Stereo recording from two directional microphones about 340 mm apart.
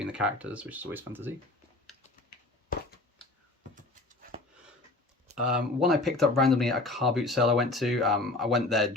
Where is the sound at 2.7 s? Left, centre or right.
Left.